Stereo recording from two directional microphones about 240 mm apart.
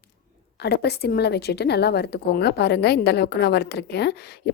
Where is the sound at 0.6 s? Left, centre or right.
Left.